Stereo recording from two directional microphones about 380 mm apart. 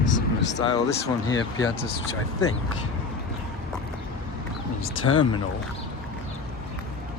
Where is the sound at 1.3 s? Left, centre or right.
Left.